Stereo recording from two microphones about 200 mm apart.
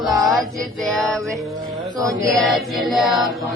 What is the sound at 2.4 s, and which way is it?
Chant, centre (ahead or behind).